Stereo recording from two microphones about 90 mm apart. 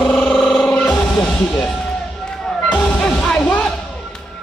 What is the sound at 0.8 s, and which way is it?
Music, 20° left (ahead or behind).